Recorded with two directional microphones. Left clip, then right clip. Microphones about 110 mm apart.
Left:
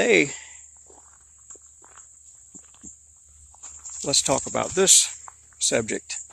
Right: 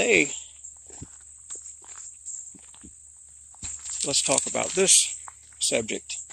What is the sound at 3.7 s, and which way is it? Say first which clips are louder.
Walk: right 4 dB; centre (ahead or behind).